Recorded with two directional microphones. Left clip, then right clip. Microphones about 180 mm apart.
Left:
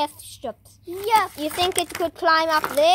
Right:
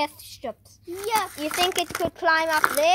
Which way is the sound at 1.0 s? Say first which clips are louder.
Left 6 dB; 45° left (ahead or behind).